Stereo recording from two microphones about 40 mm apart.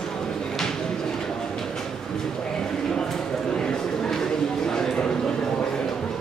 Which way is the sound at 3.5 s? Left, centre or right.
Left.